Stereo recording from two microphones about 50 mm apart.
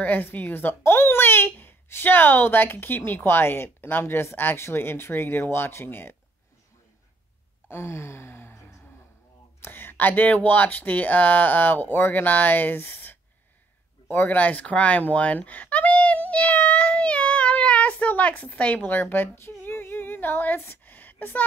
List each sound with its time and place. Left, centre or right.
0.0 s a child's voice: left
7.7 s gasp: left
9.6 s speech: left
14.0 s a sound: left
18.8 s speech: left
19.7 s female singing: left